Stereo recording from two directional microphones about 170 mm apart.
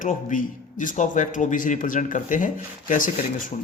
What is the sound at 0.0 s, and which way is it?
Speech, 50° left (ahead or behind).